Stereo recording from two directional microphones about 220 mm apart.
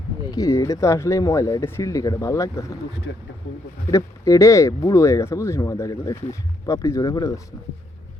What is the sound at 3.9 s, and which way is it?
Speech, 15° left (ahead or behind).